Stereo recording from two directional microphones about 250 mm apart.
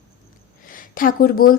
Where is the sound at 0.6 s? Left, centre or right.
Left.